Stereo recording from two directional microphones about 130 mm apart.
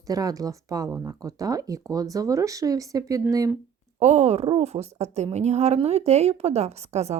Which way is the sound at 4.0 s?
55° right (ahead or behind).